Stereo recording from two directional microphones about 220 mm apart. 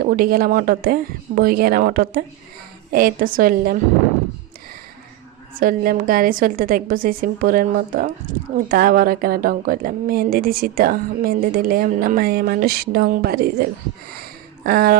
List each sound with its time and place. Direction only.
0.1 s a woman's voice: 40° right (ahead or behind)
5.6 s a woman's voice: 40° right (ahead or behind)
14.6 s a sound: 45° right (ahead or behind)